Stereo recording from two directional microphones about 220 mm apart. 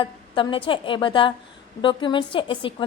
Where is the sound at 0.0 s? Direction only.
25° left (ahead or behind).